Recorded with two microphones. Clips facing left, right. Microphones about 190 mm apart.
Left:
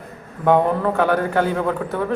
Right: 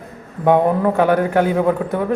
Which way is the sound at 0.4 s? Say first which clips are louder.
Right 2 dB; 15° right (ahead or behind).